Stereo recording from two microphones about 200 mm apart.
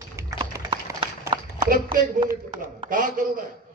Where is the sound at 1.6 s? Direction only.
45° right (ahead or behind).